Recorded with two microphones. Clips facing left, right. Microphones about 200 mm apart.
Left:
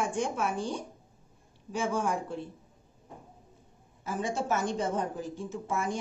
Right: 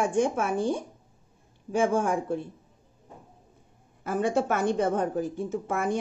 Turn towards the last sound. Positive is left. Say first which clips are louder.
# right 5 dB
turn(degrees=-60)  # may be behind; listen again after turning